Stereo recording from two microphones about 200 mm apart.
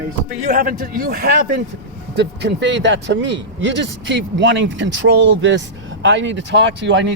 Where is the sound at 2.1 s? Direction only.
60° right (ahead or behind).